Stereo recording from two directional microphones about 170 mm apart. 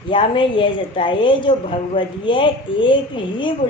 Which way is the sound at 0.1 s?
30° left (ahead or behind).